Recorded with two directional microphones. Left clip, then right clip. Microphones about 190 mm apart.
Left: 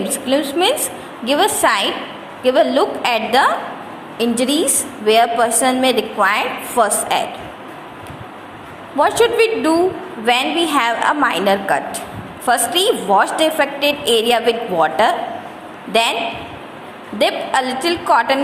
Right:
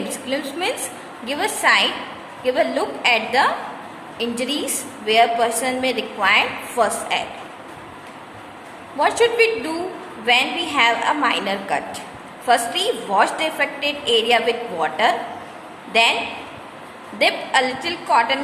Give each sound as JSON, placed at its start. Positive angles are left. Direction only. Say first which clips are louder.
{"t": 1.2, "sound": "a woman's voice", "louder": "left 6 dB", "side_deg": 15}
{"t": 9.0, "sound": "a woman's voice", "louder": "left 3 dB", "side_deg": 15}
{"t": 17.2, "sound": "a woman's voice", "louder": "left 1 dB", "side_deg": 20}